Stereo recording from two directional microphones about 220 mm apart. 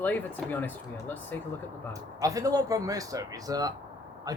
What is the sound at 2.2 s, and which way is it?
Speech, 15° right (ahead or behind).